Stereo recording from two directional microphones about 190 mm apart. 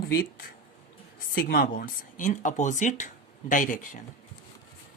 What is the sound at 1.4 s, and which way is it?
Speech, 50° left (ahead or behind).